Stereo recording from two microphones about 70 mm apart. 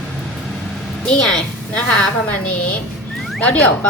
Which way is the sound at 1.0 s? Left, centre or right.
Centre.